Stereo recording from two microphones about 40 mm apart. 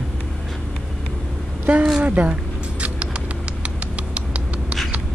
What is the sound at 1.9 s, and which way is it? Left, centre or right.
Speech, right.